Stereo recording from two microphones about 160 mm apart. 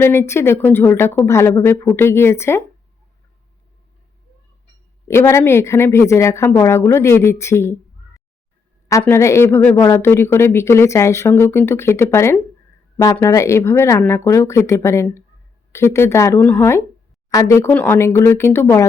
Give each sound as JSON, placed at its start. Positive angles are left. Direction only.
{"t": 0.0, "sound": "speech", "side_deg": 15}
{"t": 5.0, "sound": "speech", "side_deg": 15}
{"t": 8.9, "sound": "speech", "side_deg": 15}